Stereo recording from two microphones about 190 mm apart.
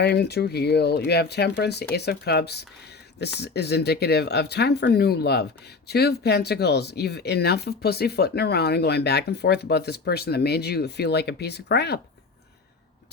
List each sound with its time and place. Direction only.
0.0 s speech: 60° left (ahead or behind)